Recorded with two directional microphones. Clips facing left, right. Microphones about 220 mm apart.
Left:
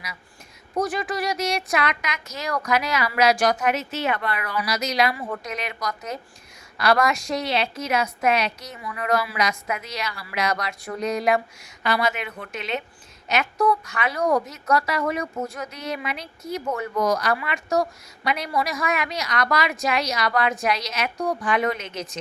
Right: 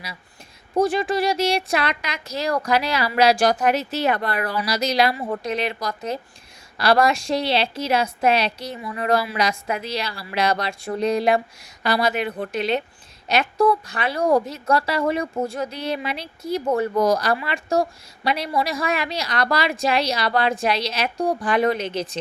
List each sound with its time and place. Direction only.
0.8 s a woman's voice: 30° right (ahead or behind)